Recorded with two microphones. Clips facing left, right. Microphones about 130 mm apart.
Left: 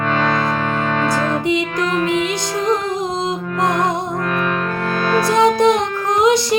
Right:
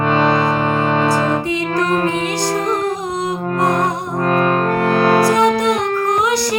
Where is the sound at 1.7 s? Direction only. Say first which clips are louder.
Right 2 dB; 40° right (ahead or behind).